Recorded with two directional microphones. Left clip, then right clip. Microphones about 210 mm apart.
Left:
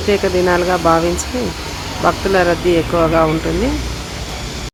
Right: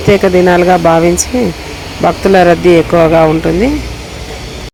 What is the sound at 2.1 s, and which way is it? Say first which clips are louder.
Speech: right 7 dB; 25° right (ahead or behind).